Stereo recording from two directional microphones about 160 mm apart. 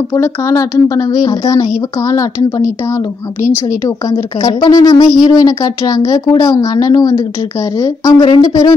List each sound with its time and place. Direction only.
0.1 s a woman's voice: 20° left (ahead or behind)